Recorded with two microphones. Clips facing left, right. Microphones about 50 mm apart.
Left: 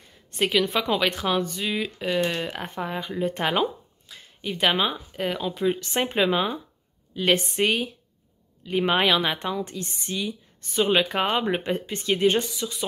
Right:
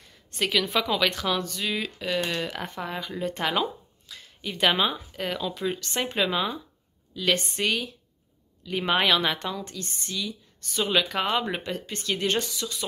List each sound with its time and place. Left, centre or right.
0.4 s a woman's voice: centre
7.2 s a woman's voice: left
8.6 s speech: centre
9.4 s a woman's voice: centre